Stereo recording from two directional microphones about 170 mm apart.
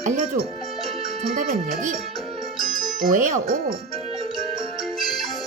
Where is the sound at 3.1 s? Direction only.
50° right (ahead or behind).